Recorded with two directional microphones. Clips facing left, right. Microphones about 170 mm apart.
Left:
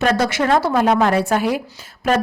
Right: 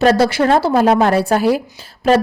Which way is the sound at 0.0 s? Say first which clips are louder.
Right 5 dB; 30° right (ahead or behind).